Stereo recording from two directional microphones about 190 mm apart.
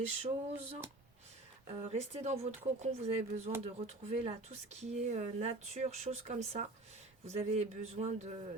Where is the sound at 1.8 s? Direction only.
35° right (ahead or behind).